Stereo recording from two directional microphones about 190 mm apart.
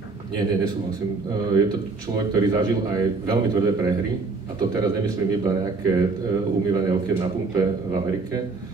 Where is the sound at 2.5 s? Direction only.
20° right (ahead or behind).